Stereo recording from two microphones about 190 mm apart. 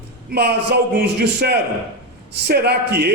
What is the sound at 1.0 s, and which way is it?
A man's voice, 60° right (ahead or behind).